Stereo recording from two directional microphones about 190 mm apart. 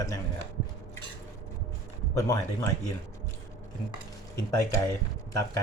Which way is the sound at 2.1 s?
20° left (ahead or behind).